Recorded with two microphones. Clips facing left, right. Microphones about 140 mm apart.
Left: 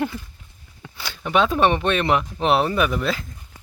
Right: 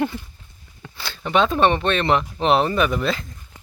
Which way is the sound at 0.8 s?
10° left (ahead or behind).